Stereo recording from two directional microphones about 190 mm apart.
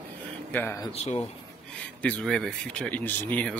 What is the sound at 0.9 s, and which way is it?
Speech, 35° left (ahead or behind).